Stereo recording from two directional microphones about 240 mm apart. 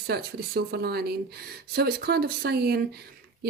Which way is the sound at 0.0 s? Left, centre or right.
Right.